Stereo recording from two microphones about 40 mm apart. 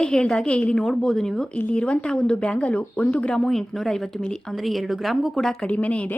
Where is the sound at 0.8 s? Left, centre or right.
Centre.